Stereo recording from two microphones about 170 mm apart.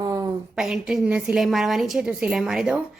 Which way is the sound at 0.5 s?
5° right (ahead or behind).